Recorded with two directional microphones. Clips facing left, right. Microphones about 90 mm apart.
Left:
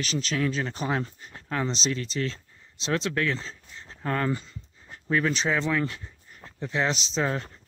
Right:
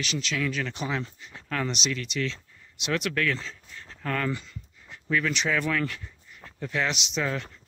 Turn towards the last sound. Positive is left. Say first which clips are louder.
# left 2 dB
turn(degrees=30)  # may be behind; listen again after turning